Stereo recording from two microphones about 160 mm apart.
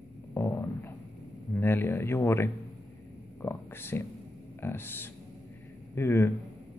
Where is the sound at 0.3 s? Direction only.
20° left (ahead or behind).